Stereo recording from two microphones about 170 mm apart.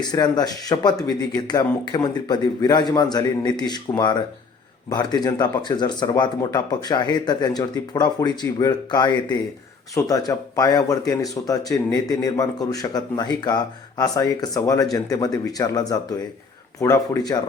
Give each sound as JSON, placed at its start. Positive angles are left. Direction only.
{"t": 0.0, "sound": "speech", "side_deg": 25}